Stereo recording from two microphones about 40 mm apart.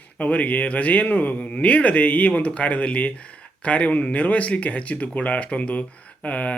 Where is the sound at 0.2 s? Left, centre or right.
Left.